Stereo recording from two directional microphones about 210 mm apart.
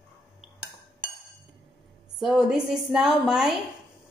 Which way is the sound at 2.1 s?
5° right (ahead or behind).